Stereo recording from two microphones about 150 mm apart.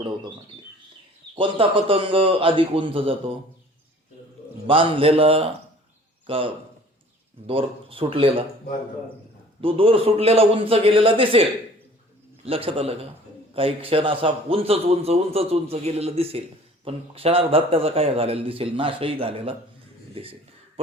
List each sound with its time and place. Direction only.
1.4 s a man's voice: 35° right (ahead or behind)
4.6 s a man's voice: 35° right (ahead or behind)
9.6 s a man's voice: 40° right (ahead or behind)
12.5 s a man's voice: 40° right (ahead or behind)